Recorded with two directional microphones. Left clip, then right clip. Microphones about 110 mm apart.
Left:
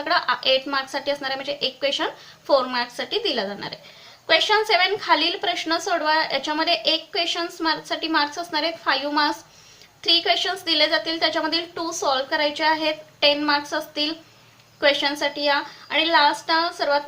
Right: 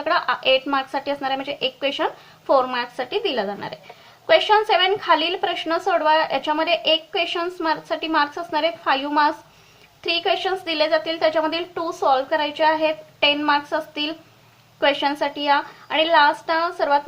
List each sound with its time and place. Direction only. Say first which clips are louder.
0.0 s a woman's voice: right 1 dB; 45° right (ahead or behind)
5.5 s a woman's voice: right 2 dB; 60° right (ahead or behind)